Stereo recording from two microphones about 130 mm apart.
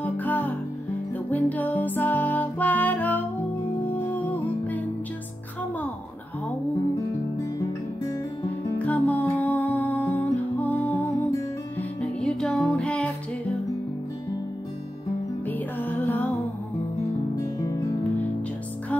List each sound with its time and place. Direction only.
0.0 s music: 10° left (ahead or behind)
8.7 s music: 10° left (ahead or behind)
12.0 s music: 5° left (ahead or behind)
15.4 s music: 15° left (ahead or behind)
17.6 s music: 25° left (ahead or behind)